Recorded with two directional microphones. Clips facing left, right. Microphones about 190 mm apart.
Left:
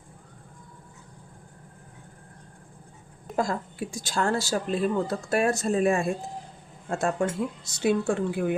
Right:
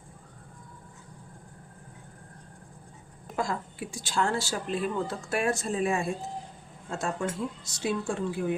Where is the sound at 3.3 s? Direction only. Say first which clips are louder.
Left 4 dB; 40° left (ahead or behind); by 8.5 s 60° left (ahead or behind).